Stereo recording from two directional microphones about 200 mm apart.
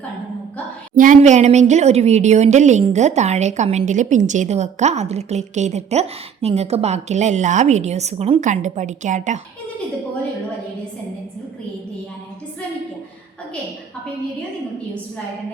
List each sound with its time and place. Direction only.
0.9 s a woman's voice: 40° right (ahead or behind)